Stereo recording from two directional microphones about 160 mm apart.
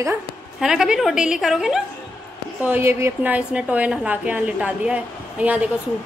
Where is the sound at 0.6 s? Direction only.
5° right (ahead or behind).